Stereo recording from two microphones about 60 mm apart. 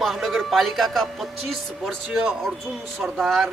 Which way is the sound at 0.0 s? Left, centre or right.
Centre.